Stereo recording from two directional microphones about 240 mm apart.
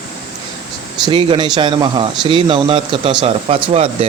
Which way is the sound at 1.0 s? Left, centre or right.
Centre.